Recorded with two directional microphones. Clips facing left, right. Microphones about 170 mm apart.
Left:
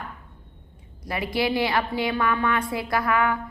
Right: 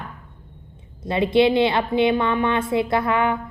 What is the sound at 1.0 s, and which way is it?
A woman's voice, 25° right (ahead or behind).